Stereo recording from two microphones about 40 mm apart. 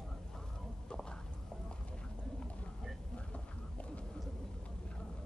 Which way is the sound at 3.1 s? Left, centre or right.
Left.